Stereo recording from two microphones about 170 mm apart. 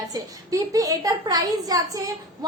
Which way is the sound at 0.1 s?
20° right (ahead or behind).